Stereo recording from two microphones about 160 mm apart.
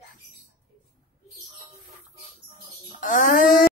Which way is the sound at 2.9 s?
55° left (ahead or behind).